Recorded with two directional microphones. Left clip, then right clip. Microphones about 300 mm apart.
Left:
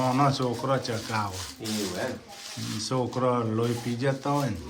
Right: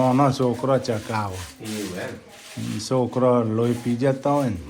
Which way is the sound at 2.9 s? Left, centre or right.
Centre.